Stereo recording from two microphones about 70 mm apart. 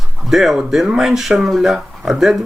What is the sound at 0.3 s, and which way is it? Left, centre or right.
Speech, centre.